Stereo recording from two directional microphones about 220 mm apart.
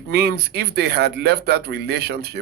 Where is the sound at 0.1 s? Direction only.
50° right (ahead or behind).